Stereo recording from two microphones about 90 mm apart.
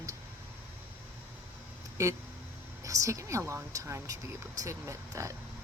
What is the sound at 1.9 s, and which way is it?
A woman's voice, 30° right (ahead or behind).